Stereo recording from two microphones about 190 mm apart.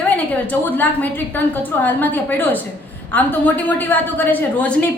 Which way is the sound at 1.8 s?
10° left (ahead or behind).